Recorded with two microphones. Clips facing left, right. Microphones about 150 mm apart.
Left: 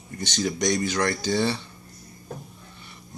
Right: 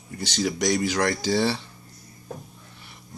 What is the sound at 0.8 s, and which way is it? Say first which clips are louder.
Speech: right 1 dB; 90° right.